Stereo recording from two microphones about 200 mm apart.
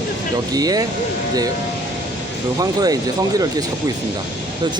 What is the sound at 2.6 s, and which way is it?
Speech, 20° right (ahead or behind).